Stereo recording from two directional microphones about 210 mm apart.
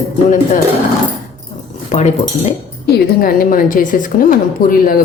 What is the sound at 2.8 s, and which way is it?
A woman's voice, 45° left (ahead or behind).